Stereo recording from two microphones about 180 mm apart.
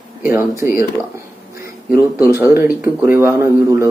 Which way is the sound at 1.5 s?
15° right (ahead or behind).